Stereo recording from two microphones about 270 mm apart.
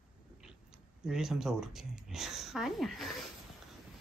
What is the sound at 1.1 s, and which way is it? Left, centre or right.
Speech, centre.